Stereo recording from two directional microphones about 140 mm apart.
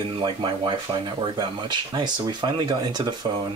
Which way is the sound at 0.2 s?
35° right (ahead or behind).